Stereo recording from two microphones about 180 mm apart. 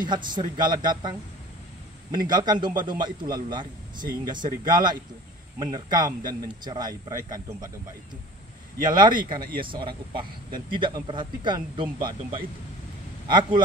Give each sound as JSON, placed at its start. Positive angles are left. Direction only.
{"t": 0.0, "sound": "a man's voice", "side_deg": -25}
{"t": 8.9, "sound": "a man's voice", "side_deg": -25}
{"t": 9.4, "sound": "speech", "side_deg": -55}
{"t": 9.7, "sound": "a man's voice", "side_deg": -30}